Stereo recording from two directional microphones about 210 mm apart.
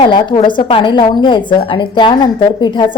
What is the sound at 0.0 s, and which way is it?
A woman's voice, 20° left (ahead or behind).